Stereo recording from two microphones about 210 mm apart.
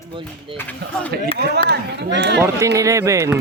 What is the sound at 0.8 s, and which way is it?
Speech, 55° right (ahead or behind).